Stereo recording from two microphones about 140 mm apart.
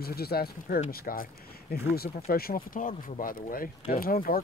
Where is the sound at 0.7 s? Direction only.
75° left (ahead or behind).